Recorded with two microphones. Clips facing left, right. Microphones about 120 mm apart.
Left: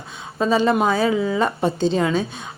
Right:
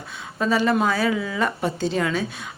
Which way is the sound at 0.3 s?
25° left (ahead or behind).